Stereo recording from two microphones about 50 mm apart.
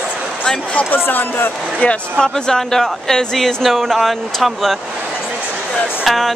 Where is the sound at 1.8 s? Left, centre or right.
Centre.